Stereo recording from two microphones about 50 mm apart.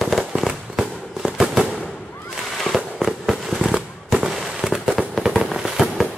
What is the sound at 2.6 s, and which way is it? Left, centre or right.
Fireworks, centre.